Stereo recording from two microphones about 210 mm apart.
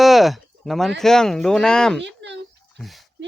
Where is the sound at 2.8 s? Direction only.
Centre (ahead or behind).